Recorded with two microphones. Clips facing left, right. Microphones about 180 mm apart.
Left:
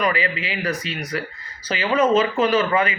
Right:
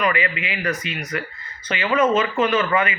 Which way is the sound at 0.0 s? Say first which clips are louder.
Even; 35° left (ahead or behind).